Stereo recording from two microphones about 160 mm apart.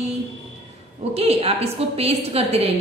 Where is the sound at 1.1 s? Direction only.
40° right (ahead or behind).